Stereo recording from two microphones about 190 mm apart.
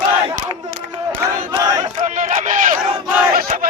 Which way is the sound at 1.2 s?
20° right (ahead or behind).